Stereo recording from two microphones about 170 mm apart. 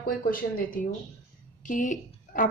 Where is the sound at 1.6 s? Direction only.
50° left (ahead or behind).